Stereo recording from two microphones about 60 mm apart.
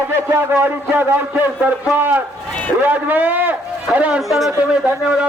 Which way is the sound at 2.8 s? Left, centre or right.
Right.